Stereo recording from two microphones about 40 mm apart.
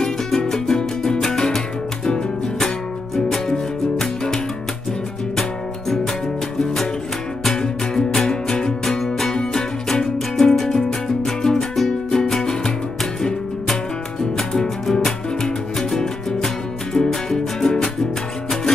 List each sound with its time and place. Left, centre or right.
0.0 s music: centre
7.5 s music: centre
9.3 s music: centre
14.3 s music: centre